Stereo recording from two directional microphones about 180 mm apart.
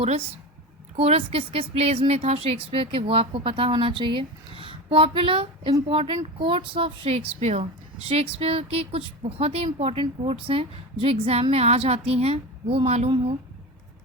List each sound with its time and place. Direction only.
0.9 s speech: 30° right (ahead or behind)